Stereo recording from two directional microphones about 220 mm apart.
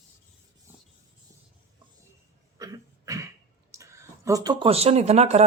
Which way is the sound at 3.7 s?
15° right (ahead or behind).